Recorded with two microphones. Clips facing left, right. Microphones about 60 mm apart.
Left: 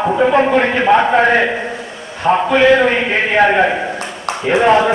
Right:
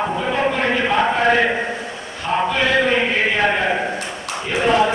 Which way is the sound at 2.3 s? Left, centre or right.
Left.